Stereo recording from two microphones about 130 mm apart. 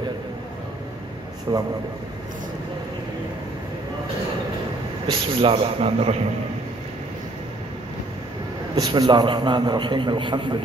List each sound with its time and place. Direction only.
1.5 s a man's voice: 30° right (ahead or behind)
5.0 s a man's voice: 45° right (ahead or behind)
8.7 s a man's voice: 35° right (ahead or behind)